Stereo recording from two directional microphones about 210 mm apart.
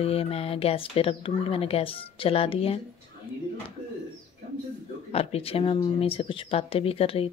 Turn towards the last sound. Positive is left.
turn(degrees=25)  # may be behind; listen again after turning